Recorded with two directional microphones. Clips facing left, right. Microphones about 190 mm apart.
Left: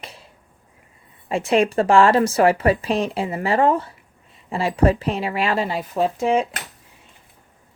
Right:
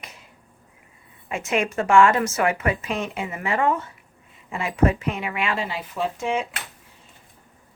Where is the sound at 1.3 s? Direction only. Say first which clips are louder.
Left 6 dB; 30° left (ahead or behind).